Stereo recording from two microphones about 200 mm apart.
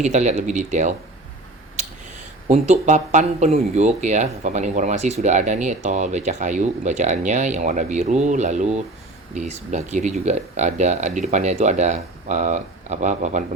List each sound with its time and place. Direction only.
0.0 s speech: 35° right (ahead or behind)
2.5 s speech: 35° right (ahead or behind)